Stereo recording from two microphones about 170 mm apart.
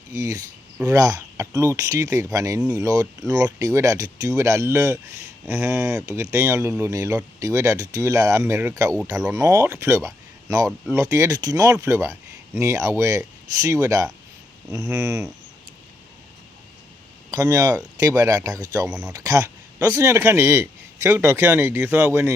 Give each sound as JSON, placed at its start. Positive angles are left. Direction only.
{"t": 0.1, "sound": "speech", "side_deg": -20}
{"t": 17.3, "sound": "speech", "side_deg": -20}